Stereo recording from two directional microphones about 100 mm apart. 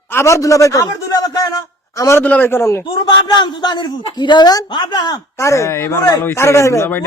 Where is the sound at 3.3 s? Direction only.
45° left (ahead or behind).